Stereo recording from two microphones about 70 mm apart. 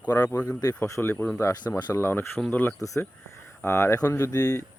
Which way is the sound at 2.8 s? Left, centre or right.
Left.